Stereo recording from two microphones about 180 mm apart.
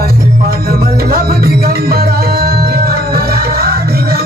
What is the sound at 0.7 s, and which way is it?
Music, 55° right (ahead or behind).